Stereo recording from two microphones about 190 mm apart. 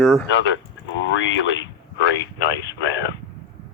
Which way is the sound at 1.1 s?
75° left (ahead or behind).